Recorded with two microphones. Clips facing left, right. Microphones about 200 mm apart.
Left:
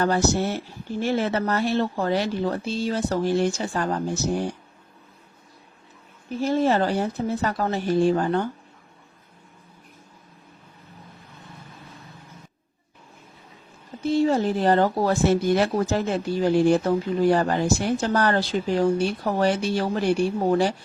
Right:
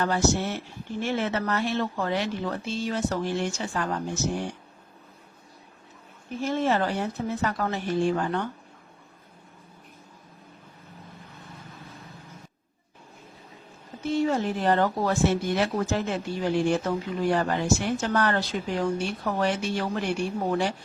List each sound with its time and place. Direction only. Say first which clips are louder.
0.0 s speech: left 3 dB; 40° left (ahead or behind)
6.4 s speech: left 4 dB; 35° left (ahead or behind)
14.1 s speech: left 4 dB; 30° left (ahead or behind)